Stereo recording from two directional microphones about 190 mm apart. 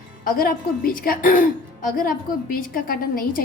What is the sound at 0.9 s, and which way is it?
A woman's voice, 45° left (ahead or behind).